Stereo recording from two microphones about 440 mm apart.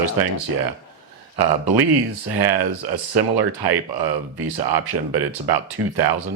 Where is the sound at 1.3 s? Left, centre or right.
Right.